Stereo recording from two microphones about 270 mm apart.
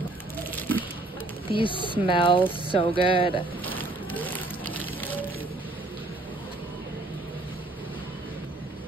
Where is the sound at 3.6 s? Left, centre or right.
Centre.